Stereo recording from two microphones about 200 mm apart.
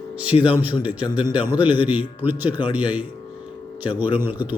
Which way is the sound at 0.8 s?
5° right (ahead or behind).